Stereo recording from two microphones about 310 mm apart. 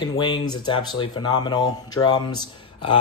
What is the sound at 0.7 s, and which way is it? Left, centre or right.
Speech, centre.